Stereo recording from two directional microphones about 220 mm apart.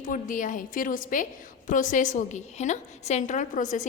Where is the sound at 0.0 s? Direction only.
35° left (ahead or behind).